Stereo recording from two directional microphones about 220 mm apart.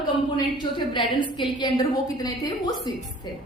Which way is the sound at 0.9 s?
20° left (ahead or behind).